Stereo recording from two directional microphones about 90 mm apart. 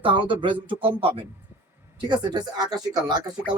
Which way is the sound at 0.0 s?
70° right (ahead or behind).